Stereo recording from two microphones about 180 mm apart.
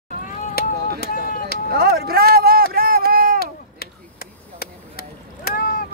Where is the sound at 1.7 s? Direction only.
55° right (ahead or behind).